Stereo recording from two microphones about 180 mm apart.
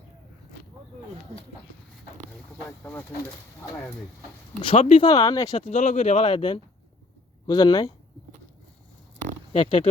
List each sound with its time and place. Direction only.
2.6 s speech: 15° left (ahead or behind)
4.6 s speech: 30° left (ahead or behind)
5.6 s speech: 40° left (ahead or behind); by 7.9 s 20° left (ahead or behind)
9.5 s speech: 30° left (ahead or behind)